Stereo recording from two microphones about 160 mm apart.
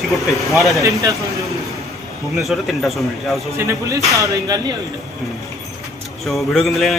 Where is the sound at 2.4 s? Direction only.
Centre (ahead or behind).